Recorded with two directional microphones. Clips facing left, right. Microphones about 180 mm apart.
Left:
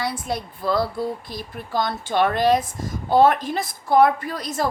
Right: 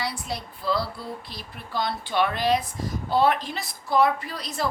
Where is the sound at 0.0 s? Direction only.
50° left (ahead or behind).